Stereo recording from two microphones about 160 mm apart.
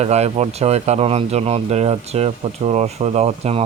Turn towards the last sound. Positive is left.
turn(degrees=-40)  # may be behind; listen again after turning